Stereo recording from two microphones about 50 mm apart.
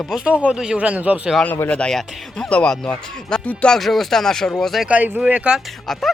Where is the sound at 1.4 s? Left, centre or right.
Left.